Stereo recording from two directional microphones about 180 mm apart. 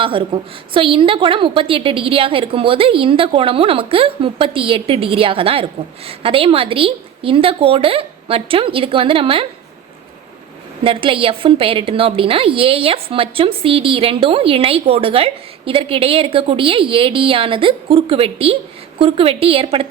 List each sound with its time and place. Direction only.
0.0 s a woman's voice: 30° right (ahead or behind)
10.8 s a woman's voice: 30° right (ahead or behind)